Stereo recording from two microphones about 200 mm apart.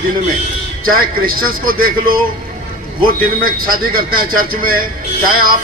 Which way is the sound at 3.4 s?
45° right (ahead or behind).